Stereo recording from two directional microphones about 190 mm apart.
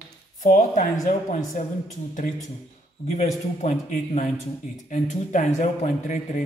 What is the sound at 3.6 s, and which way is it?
Speech, 35° left (ahead or behind).